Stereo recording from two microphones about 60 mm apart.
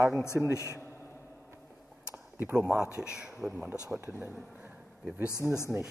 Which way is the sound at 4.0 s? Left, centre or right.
Right.